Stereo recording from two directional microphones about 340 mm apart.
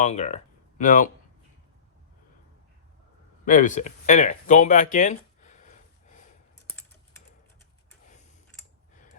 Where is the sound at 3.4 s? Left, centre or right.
Left.